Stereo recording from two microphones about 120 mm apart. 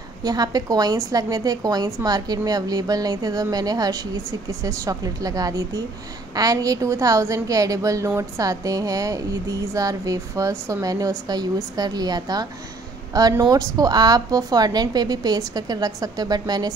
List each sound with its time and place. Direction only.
0.2 s a woman's voice: 35° right (ahead or behind)